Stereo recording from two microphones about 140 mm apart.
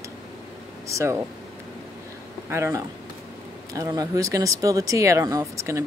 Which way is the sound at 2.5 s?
20° right (ahead or behind).